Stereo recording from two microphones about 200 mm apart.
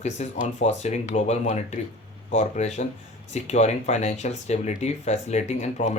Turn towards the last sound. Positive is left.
turn(degrees=35)  # may be behind; listen again after turning